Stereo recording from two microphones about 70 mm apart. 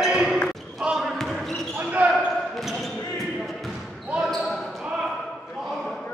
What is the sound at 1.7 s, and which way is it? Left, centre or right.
Basketball bounce, right.